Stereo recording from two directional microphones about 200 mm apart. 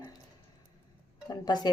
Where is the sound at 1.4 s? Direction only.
20° left (ahead or behind).